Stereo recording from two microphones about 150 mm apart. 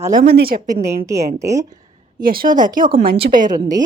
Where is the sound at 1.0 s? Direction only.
20° right (ahead or behind).